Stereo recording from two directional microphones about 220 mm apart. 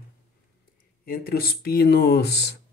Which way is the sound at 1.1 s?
45° left (ahead or behind).